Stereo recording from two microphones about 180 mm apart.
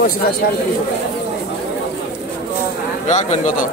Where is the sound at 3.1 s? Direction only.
40° left (ahead or behind).